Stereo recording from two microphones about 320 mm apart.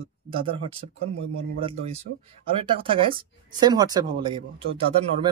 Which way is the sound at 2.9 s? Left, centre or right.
Centre.